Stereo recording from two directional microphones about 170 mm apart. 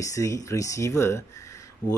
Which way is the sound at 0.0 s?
20° left (ahead or behind).